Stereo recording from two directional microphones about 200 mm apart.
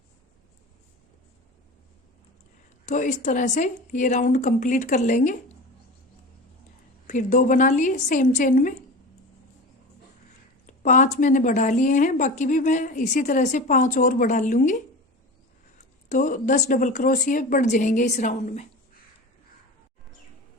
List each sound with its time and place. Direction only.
2.8 s a woman's voice: 40° left (ahead or behind)
7.1 s a woman's voice: 40° left (ahead or behind)
10.7 s a woman's voice: 40° left (ahead or behind)
16.0 s a woman's voice: 40° left (ahead or behind)